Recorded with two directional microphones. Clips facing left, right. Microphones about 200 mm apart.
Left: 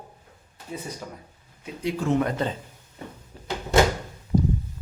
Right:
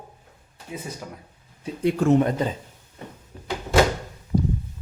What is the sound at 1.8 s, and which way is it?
Speech, 55° right (ahead or behind).